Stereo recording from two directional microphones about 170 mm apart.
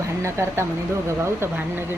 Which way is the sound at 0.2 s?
15° right (ahead or behind).